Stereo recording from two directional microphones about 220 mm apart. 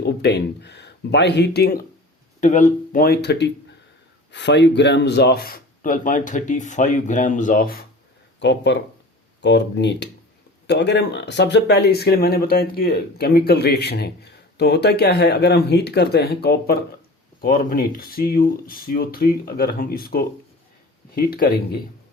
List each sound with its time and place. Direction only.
0.0 s speech: 50° left (ahead or behind)
2.4 s speech: 35° left (ahead or behind)
8.4 s speech: 55° left (ahead or behind)